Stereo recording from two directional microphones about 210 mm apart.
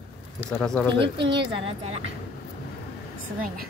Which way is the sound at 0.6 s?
5° left (ahead or behind).